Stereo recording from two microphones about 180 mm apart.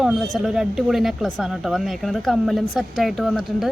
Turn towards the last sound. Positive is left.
turn(degrees=0)  # may be behind; listen again after turning